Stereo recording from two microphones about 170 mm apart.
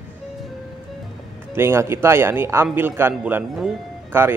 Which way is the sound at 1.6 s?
15° right (ahead or behind).